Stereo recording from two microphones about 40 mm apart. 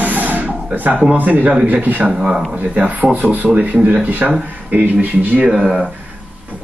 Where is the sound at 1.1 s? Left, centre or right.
Right.